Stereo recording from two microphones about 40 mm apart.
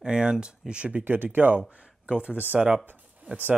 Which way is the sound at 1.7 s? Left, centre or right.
Right.